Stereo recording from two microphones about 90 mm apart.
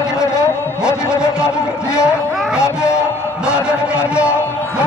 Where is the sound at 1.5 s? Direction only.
10° right (ahead or behind).